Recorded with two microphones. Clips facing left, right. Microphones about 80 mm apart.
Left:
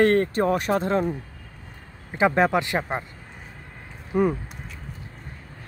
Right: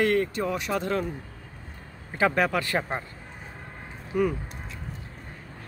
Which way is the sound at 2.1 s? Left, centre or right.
Left.